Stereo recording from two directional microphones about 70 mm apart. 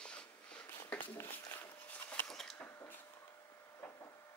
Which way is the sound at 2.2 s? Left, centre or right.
Centre.